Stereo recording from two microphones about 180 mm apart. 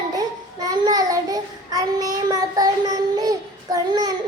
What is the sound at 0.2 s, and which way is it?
Child singing, 20° right (ahead or behind).